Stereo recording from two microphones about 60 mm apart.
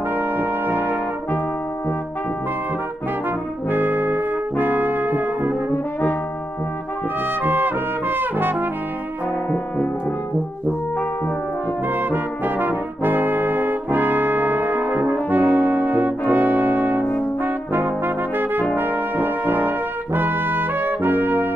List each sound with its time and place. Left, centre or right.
0.1 s brass instrument: right
3.7 s brass instrument: right
7.4 s trumpet: right
11.9 s brass instrument: right